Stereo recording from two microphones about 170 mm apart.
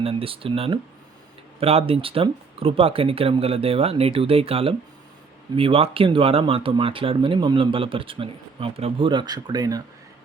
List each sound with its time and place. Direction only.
0.0 s speech: 35° right (ahead or behind)